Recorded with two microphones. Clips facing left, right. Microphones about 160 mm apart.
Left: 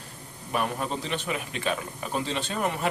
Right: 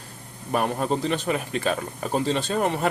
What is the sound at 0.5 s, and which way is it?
Speech, 40° right (ahead or behind).